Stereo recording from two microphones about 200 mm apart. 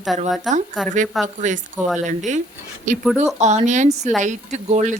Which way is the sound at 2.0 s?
35° right (ahead or behind).